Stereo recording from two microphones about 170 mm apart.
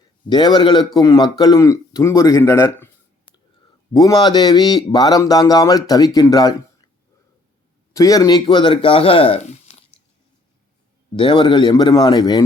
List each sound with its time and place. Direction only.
0.3 s speech: 25° left (ahead or behind)
3.9 s speech: 25° left (ahead or behind)
7.9 s speech: 20° left (ahead or behind)
9.3 s a sound: 40° left (ahead or behind)
11.1 s speech: 30° left (ahead or behind)